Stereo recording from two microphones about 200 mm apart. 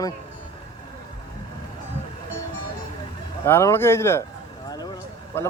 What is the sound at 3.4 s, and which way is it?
Speech, 15° left (ahead or behind).